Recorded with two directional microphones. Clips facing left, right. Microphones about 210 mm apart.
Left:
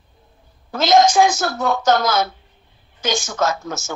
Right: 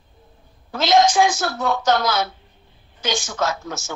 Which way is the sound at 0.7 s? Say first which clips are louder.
Left 2 dB; 45° left (ahead or behind).